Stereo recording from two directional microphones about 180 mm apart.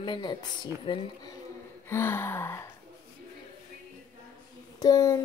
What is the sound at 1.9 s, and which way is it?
Speech, 15° left (ahead or behind).